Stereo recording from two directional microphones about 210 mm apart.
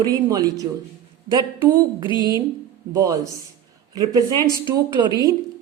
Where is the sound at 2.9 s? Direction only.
15° right (ahead or behind).